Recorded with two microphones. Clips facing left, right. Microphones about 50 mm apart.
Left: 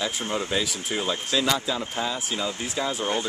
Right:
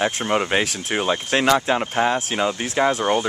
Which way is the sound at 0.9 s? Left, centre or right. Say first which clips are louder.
Right 5 dB; right.